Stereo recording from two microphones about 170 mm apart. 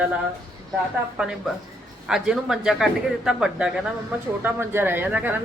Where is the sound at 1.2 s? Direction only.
5° right (ahead or behind).